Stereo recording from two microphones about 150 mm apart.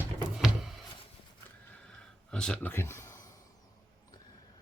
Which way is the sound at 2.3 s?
5° left (ahead or behind).